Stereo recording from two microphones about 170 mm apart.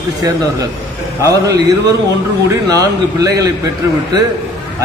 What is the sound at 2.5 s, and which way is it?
A man's voice, 20° right (ahead or behind).